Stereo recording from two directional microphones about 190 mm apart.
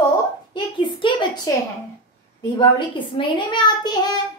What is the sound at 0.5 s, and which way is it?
Speech, 25° left (ahead or behind).